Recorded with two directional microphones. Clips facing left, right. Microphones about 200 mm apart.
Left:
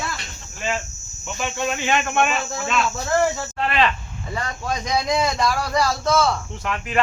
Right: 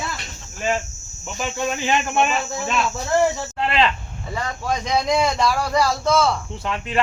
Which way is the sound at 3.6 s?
25° right (ahead or behind).